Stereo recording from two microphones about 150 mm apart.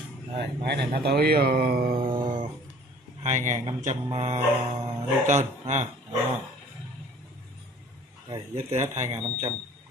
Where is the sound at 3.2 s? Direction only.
55° right (ahead or behind).